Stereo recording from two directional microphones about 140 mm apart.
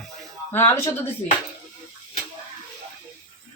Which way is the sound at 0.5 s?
15° left (ahead or behind).